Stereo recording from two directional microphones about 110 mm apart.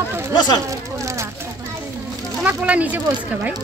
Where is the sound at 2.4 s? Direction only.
15° right (ahead or behind).